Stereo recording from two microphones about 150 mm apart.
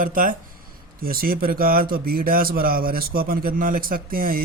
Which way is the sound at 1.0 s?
75° right (ahead or behind).